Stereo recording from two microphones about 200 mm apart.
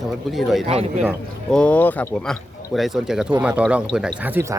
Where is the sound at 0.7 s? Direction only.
30° right (ahead or behind).